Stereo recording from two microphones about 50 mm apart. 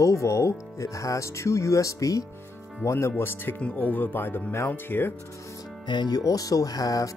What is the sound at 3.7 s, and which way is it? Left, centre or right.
Speech, left.